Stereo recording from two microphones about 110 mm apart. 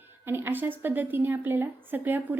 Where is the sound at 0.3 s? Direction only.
20° right (ahead or behind).